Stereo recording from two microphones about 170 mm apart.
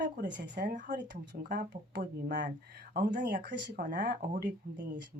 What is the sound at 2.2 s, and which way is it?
A woman's voice, 85° right.